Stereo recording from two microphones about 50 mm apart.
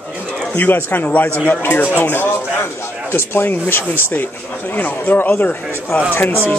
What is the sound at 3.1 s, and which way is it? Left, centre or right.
A man's voice, left.